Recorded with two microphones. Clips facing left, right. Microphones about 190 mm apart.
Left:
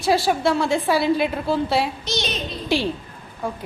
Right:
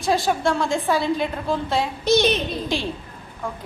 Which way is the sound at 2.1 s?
60° right (ahead or behind).